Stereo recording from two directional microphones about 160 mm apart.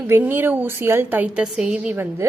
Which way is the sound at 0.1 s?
10° right (ahead or behind).